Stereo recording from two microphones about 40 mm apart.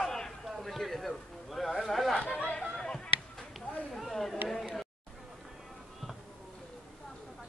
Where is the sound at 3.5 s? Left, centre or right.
Centre.